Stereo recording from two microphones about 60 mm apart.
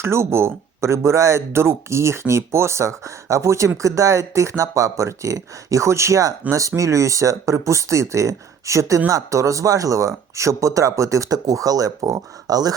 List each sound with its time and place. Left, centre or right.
0.0 s speech: right